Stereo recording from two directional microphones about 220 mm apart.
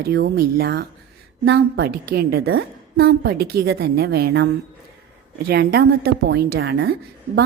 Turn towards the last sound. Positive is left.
turn(degrees=-50)  # may be behind; listen again after turning